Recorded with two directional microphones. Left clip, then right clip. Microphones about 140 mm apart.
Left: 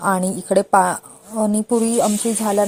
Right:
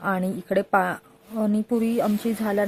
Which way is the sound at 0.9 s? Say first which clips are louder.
Left 6 dB; centre (ahead or behind).